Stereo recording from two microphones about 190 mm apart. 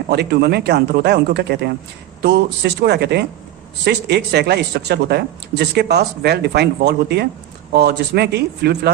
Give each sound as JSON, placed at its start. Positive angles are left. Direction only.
{"t": 0.1, "sound": "speech", "side_deg": -60}